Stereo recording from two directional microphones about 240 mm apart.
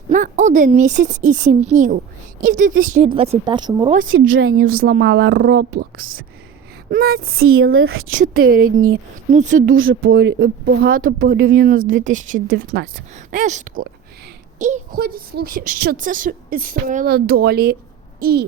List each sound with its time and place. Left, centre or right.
0.1 s speech: right
3.1 s speech: right
4.1 s speech: right
4.6 s speech: right
5.5 s speech: right
7.3 s speech: right
8.2 s speech: right
9.6 s speech: right
10.1 s speech: right